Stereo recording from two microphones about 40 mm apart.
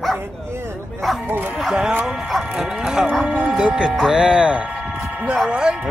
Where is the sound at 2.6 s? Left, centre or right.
Centre.